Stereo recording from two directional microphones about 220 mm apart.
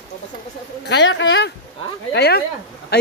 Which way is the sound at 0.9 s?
55° left (ahead or behind).